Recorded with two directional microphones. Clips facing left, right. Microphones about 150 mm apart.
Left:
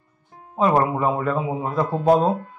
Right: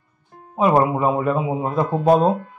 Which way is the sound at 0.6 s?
15° right (ahead or behind).